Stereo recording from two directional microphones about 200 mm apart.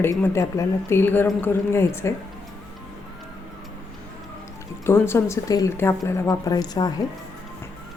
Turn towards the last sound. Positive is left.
turn(degrees=20)  # may be behind; listen again after turning